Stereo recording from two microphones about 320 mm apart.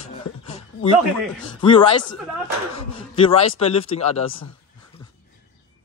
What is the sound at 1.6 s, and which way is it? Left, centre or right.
Speech, centre.